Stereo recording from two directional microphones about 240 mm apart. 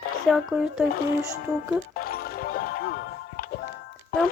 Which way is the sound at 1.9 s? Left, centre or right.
Left.